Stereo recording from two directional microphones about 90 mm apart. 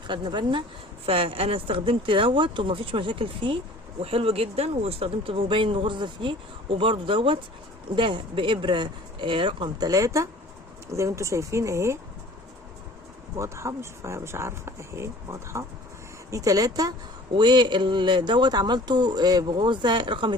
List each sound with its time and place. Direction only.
0.1 s speech: 60° right (ahead or behind)
1.0 s speech: 90° right; by 3.6 s 65° right (ahead or behind)
4.0 s speech: 90° right; by 9.9 s 60° right (ahead or behind)
9.9 s speech: 35° right (ahead or behind)
13.3 s speech: 35° right (ahead or behind)
17.3 s speech: 55° right (ahead or behind)